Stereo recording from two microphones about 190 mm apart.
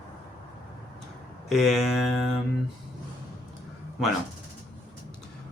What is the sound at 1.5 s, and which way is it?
Speech, centre (ahead or behind).